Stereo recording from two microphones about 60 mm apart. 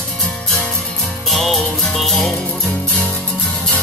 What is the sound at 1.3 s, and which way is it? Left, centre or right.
Music, centre.